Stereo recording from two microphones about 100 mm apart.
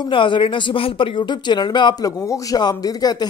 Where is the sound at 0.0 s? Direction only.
55° left (ahead or behind).